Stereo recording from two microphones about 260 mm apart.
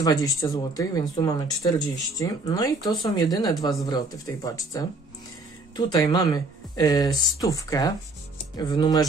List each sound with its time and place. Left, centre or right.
0.0 s speech: centre